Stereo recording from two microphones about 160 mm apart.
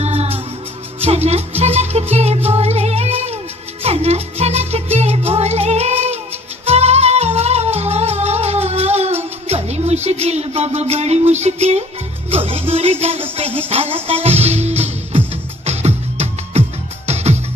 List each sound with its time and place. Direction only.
0.0 s music: 40° right (ahead or behind)